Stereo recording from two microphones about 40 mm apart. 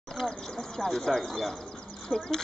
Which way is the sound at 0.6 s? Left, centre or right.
Centre.